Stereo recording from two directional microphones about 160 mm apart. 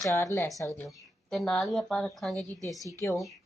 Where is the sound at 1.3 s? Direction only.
Centre (ahead or behind).